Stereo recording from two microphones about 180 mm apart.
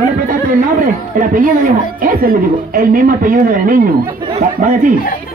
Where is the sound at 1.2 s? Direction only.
50° right (ahead or behind).